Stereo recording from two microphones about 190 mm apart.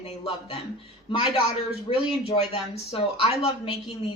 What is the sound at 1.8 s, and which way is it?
Speech, 30° left (ahead or behind).